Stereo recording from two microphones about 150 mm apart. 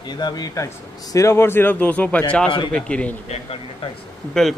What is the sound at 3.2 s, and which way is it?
Speech, 45° left (ahead or behind).